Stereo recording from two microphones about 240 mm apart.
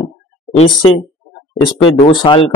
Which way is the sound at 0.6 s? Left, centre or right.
Left.